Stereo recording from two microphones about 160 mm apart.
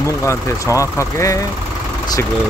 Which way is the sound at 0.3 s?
20° left (ahead or behind).